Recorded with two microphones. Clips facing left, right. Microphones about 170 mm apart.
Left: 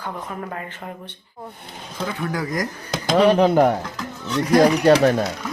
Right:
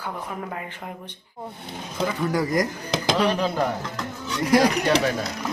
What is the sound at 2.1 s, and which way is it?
Speech, centre (ahead or behind).